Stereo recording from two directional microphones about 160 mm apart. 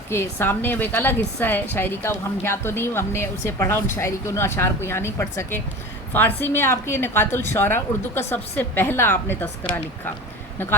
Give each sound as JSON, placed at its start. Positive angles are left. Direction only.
{"t": 0.1, "sound": "a woman's voice", "side_deg": 15}